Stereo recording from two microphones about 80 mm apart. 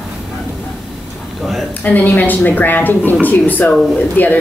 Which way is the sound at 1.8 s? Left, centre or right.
Left.